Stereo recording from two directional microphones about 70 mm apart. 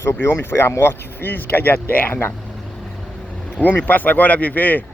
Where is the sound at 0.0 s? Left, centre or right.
Left.